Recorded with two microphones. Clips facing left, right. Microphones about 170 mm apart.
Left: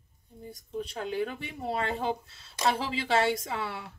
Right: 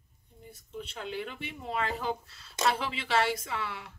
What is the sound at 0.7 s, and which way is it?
A woman's voice, 35° left (ahead or behind).